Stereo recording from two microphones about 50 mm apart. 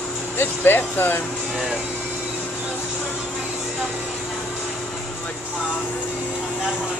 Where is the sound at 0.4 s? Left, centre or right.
Left.